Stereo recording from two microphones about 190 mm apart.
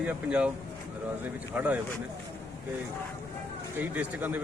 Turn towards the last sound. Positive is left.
turn(degrees=-10)  # may be behind; listen again after turning